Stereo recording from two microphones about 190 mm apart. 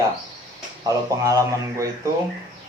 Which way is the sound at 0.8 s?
15° right (ahead or behind).